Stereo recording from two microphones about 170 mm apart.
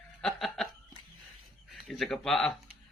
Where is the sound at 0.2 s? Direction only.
Centre (ahead or behind).